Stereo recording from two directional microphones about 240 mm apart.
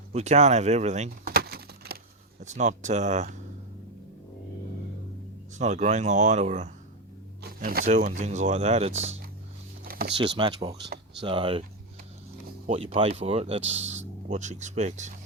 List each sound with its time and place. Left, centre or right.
0.1 s a sound: right
2.4 s speech: right
5.5 s speech: right
9.8 s a sound: right
10.2 s speech: right
12.6 s speech: right